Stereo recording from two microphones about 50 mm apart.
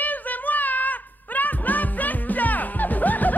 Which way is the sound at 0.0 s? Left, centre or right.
Left.